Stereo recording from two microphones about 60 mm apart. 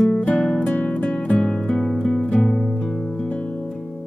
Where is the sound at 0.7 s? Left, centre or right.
Left.